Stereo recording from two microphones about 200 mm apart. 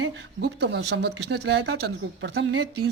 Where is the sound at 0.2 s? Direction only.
60° right (ahead or behind).